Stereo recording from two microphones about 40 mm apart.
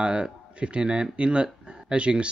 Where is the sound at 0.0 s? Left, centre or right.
Right.